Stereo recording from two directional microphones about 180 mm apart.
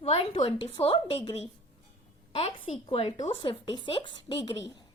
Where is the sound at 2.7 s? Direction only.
35° left (ahead or behind).